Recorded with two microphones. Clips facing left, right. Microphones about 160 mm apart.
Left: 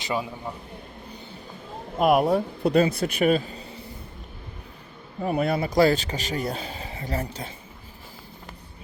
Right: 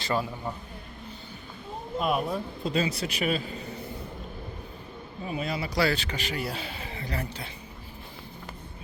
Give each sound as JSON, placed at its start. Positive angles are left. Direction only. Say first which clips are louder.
{"t": 0.0, "sound": "a man's voice", "louder": "even", "side_deg": 5}
{"t": 2.0, "sound": "speech", "louder": "left 8 dB", "side_deg": 70}
{"t": 5.2, "sound": "a man's voice", "louder": "left 8 dB", "side_deg": 65}